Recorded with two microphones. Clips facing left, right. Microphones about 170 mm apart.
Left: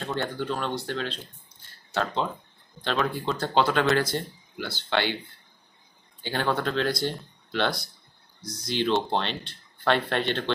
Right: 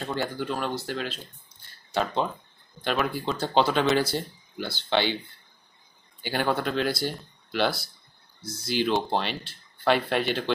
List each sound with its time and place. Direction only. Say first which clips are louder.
0.0 s speech: even; 5° right (ahead or behind)
6.2 s speech: right 1 dB; 5° right (ahead or behind)